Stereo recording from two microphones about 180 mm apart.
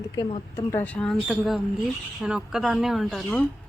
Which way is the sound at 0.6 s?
10° left (ahead or behind).